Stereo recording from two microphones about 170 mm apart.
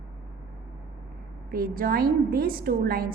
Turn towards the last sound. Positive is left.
turn(degrees=-60)  # may be behind; listen again after turning